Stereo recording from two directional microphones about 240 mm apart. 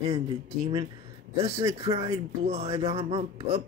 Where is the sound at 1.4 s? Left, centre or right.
Centre.